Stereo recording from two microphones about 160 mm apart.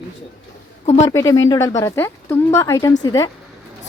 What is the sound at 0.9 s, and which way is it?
Speech, 45° left (ahead or behind).